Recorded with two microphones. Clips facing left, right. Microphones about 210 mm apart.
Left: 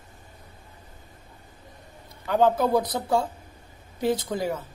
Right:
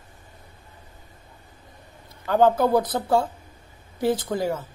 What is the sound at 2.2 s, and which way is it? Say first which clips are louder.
Speech: right 2 dB; 15° left (ahead or behind).